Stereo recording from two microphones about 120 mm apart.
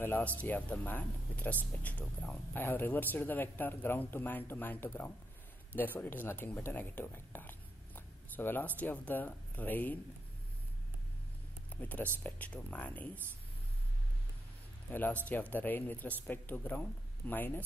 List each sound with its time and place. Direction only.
0.0 s speech: 15° left (ahead or behind)
11.7 s speech: 10° left (ahead or behind)
14.9 s speech: 15° left (ahead or behind)